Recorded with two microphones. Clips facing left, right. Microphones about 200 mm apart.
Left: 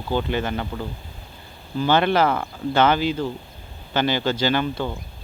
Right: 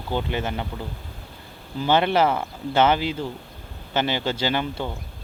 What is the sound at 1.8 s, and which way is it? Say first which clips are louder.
Speech: left 1 dB; 20° right (ahead or behind).